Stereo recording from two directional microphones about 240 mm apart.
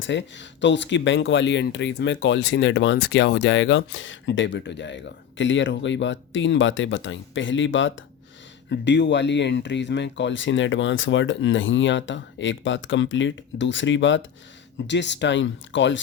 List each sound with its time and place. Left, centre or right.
0.0 s speech: left